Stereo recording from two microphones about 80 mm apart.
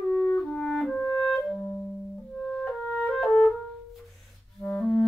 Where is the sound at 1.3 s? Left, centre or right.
Centre.